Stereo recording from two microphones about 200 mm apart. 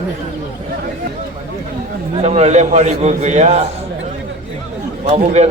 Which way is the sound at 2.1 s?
30° right (ahead or behind).